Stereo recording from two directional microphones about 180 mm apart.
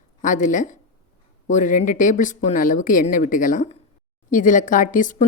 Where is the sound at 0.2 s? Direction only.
45° left (ahead or behind).